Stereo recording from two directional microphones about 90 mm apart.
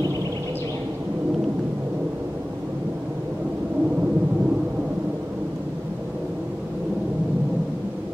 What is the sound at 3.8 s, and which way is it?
Thunder, 15° right (ahead or behind).